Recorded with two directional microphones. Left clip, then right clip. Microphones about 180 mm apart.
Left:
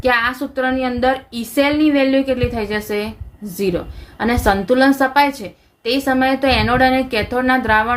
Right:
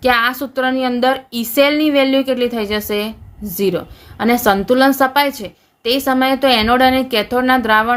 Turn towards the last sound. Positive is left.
turn(degrees=-35)  # may be behind; listen again after turning